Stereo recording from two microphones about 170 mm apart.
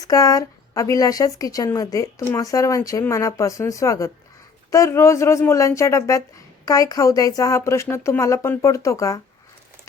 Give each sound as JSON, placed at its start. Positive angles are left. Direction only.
{"t": 0.0, "sound": "a woman's voice", "side_deg": 20}